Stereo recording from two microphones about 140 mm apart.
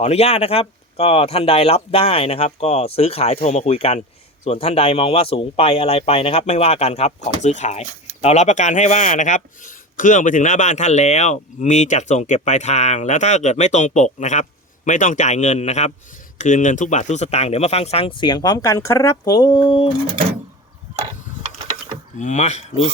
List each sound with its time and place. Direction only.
0.0 s speech: 50° left (ahead or behind); by 19.5 s 30° left (ahead or behind)
22.2 s speech: 55° left (ahead or behind)